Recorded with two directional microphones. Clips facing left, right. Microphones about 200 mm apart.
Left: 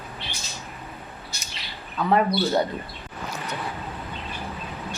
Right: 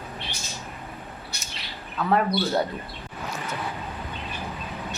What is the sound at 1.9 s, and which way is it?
Speech, centre (ahead or behind).